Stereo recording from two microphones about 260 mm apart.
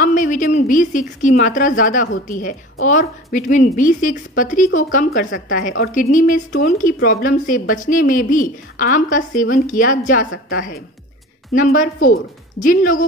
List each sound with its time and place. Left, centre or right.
0.0 s a woman's voice: left